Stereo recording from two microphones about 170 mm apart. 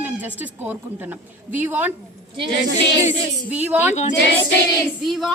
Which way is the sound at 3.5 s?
10° right (ahead or behind).